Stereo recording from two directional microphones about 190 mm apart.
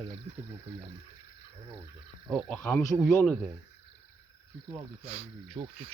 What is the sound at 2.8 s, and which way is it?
Speech, 15° left (ahead or behind).